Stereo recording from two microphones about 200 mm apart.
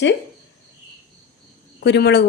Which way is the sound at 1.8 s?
55° left (ahead or behind).